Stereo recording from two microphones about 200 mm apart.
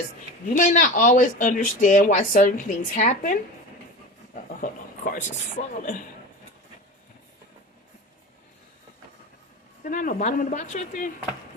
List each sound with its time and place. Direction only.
0.4 s speech: 40° left (ahead or behind)
5.1 s speech: 40° left (ahead or behind)
9.8 s speech: 40° left (ahead or behind)